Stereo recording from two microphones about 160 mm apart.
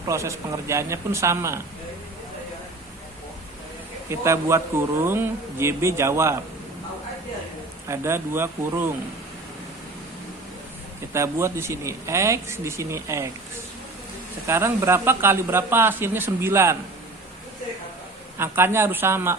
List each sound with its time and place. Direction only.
0.1 s a man's voice: 20° right (ahead or behind)
4.1 s a man's voice: 15° right (ahead or behind)
7.9 s a man's voice: 15° right (ahead or behind)
11.1 s a man's voice: 15° right (ahead or behind)
14.4 s a man's voice: 15° right (ahead or behind)
18.3 s a man's voice: 15° right (ahead or behind)